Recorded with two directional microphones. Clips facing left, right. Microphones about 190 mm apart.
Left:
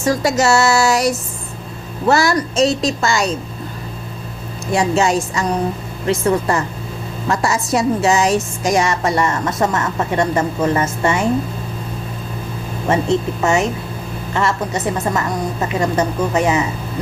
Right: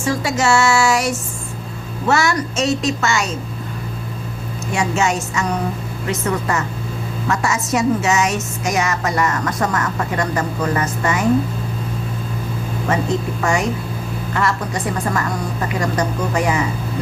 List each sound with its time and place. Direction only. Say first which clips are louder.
0.0 s a woman's voice: left 3 dB; 40° left (ahead or behind)
4.7 s a woman's voice: left 4 dB; 35° left (ahead or behind)
12.9 s a woman's voice: left 4 dB; 25° left (ahead or behind)